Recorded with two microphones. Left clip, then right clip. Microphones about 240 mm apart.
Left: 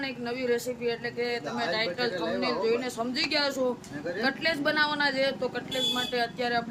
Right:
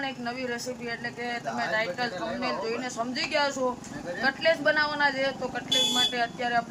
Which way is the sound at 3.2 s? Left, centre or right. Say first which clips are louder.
Right 1 dB; centre.